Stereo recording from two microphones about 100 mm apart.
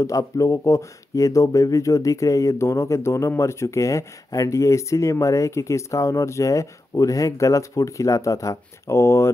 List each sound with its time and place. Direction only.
0.0 s speech: 35° left (ahead or behind)